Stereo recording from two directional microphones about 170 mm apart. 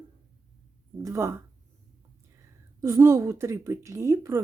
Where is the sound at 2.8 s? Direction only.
20° right (ahead or behind).